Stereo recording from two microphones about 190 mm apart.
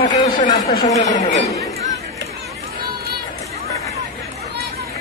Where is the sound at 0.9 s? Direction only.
40° left (ahead or behind).